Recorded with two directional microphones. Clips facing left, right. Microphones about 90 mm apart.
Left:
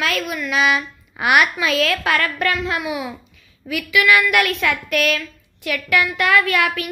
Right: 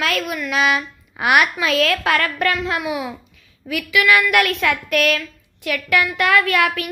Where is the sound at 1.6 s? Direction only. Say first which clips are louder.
Right 1 dB; 55° right (ahead or behind).